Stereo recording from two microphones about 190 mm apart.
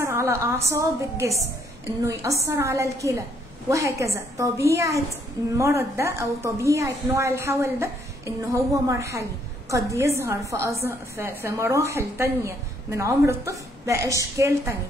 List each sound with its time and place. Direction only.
0.0 s a woman's voice: 15° right (ahead or behind)